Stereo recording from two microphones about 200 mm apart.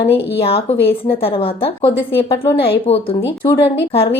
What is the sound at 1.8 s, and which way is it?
Speech, 15° left (ahead or behind).